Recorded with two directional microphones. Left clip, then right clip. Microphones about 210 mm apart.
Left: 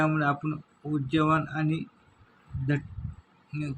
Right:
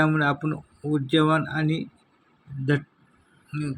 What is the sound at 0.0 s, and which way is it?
Speech, 20° right (ahead or behind).